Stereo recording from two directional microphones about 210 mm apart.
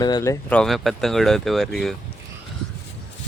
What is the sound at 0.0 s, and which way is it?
Speech, 15° left (ahead or behind).